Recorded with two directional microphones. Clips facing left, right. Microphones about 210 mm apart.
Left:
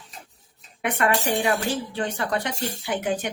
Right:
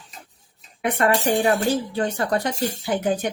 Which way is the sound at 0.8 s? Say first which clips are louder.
Right 3 dB; 35° right (ahead or behind).